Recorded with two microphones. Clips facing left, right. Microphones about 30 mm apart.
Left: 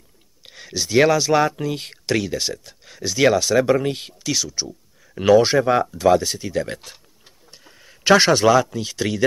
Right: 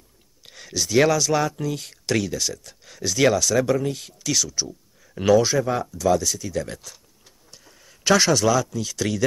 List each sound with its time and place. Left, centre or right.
0.4 s speech: centre; by 1.9 s left
2.0 s speech: centre
2.3 s speech: left
2.8 s speech: centre
3.3 s speech: left
4.2 s speech: centre
5.4 s speech: left